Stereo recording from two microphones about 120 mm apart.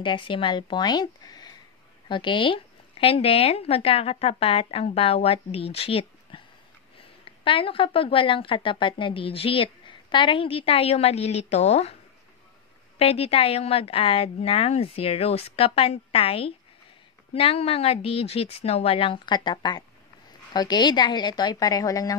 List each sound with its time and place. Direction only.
0.0 s a woman's voice: 45° left (ahead or behind); by 12.0 s 60° left (ahead or behind)
13.0 s a woman's voice: 55° left (ahead or behind); by 22.1 s 30° left (ahead or behind)